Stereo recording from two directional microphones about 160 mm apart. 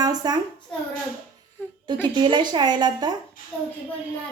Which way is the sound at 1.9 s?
30° right (ahead or behind).